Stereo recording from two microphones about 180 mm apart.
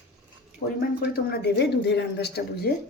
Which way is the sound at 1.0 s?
60° left (ahead or behind).